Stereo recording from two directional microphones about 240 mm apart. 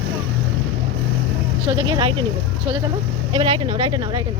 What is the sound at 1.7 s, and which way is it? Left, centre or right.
Sheep, right.